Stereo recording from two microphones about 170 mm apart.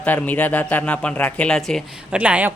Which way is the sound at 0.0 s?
10° left (ahead or behind).